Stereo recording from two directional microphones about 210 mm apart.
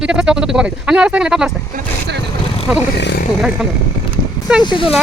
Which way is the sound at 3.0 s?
55° left (ahead or behind).